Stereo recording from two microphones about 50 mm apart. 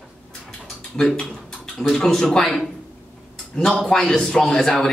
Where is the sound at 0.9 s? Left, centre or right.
Centre.